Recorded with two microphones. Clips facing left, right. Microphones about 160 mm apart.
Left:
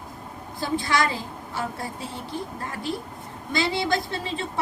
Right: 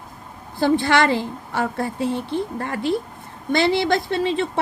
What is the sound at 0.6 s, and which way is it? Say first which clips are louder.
A woman's voice: right 7 dB; 70° right (ahead or behind).